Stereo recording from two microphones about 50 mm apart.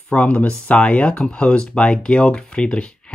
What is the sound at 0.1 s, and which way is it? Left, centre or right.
Speech, left.